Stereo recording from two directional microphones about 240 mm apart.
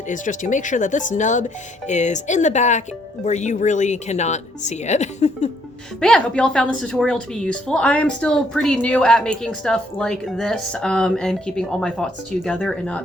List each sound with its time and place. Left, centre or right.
0.1 s speech: left
6.0 s a woman's voice: centre